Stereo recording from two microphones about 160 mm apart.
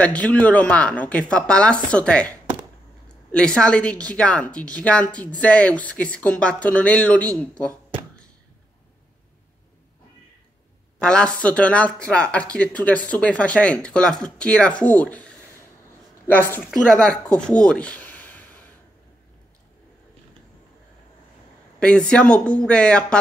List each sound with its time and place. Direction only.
0.0 s speech: 10° left (ahead or behind)
3.3 s speech: 5° left (ahead or behind)
11.0 s speech: 5° left (ahead or behind)
16.7 s speech: 5° left (ahead or behind)
21.7 s speech: 5° left (ahead or behind)